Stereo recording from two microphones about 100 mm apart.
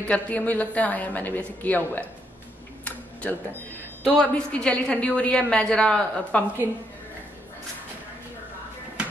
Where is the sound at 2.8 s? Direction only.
15° left (ahead or behind).